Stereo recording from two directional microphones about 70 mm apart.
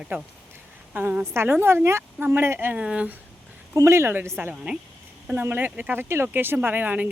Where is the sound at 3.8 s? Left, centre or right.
Right.